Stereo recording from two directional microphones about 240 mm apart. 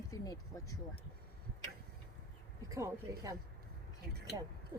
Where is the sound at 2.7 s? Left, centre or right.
Centre.